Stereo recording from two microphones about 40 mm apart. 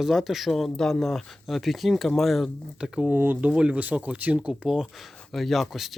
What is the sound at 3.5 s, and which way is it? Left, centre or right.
Speech, right.